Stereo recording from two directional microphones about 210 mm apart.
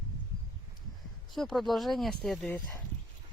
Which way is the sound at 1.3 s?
Centre (ahead or behind).